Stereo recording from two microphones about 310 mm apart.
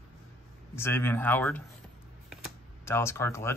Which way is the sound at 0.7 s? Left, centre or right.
Centre.